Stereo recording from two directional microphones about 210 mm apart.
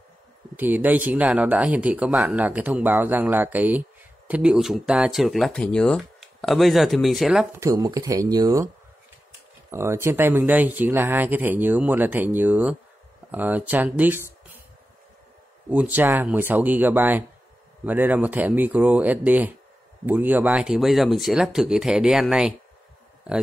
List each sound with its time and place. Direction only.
0.6 s speech: 10° right (ahead or behind)
7.5 s speech: 15° right (ahead or behind)
9.7 s speech: 10° right (ahead or behind)
15.7 s speech: 10° right (ahead or behind)